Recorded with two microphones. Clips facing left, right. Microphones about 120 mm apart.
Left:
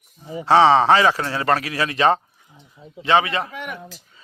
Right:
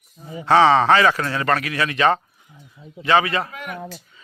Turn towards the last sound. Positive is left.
turn(degrees=20)  # may be behind; listen again after turning